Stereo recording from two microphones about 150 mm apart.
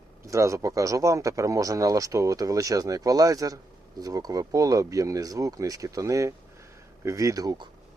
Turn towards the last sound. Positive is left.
turn(degrees=-30)  # may be behind; listen again after turning